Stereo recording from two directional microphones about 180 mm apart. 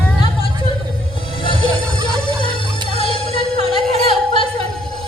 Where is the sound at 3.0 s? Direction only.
30° left (ahead or behind).